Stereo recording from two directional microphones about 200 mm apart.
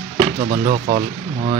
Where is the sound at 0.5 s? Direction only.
30° right (ahead or behind).